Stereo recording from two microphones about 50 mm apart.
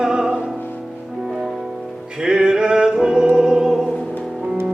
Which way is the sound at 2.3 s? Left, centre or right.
Centre.